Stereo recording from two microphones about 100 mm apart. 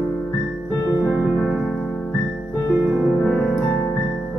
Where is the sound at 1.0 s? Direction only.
10° right (ahead or behind).